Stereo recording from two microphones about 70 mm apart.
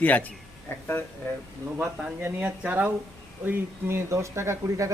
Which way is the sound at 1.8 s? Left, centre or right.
Centre.